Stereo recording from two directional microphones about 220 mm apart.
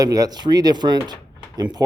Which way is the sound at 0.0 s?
15° right (ahead or behind).